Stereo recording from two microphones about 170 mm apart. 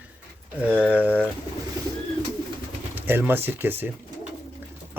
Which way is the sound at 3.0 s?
10° right (ahead or behind).